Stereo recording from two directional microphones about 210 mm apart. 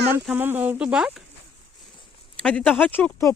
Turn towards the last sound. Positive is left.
turn(degrees=10)  # may be behind; listen again after turning